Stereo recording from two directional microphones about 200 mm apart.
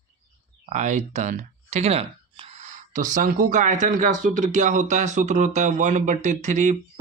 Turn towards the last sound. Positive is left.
turn(degrees=-40)  # may be behind; listen again after turning